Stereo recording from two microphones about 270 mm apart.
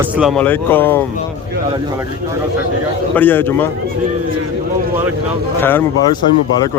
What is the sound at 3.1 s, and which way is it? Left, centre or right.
Speech, centre.